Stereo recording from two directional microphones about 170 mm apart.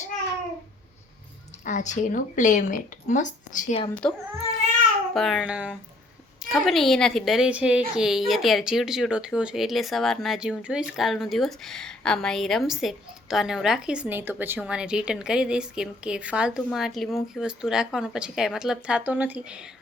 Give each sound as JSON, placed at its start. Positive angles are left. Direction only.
{"t": 1.6, "sound": "speech", "side_deg": 45}
{"t": 5.1, "sound": "a woman's voice", "side_deg": 0}